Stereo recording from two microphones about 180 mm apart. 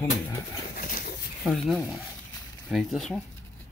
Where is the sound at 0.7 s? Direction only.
50° left (ahead or behind).